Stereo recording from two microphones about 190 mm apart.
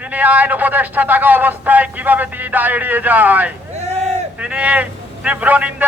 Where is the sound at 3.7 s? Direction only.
35° right (ahead or behind).